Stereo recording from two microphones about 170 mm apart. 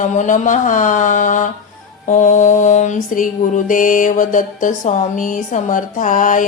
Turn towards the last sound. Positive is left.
turn(degrees=50)  # may be behind; listen again after turning